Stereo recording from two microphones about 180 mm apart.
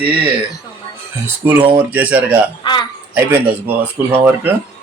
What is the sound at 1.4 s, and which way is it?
Speech, 10° right (ahead or behind).